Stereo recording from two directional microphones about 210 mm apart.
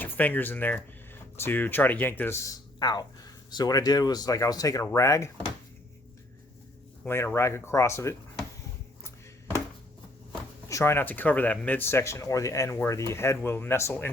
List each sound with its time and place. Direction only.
0.0 s speech: 10° left (ahead or behind)
2.7 s speech: 20° left (ahead or behind)
7.0 s speech: 10° left (ahead or behind)
10.7 s speech: 15° left (ahead or behind)